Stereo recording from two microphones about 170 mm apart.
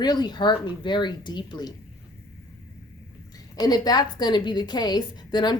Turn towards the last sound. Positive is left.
turn(degrees=25)  # may be behind; listen again after turning